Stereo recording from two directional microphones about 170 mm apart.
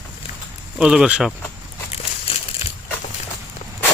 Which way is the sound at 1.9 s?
35° left (ahead or behind).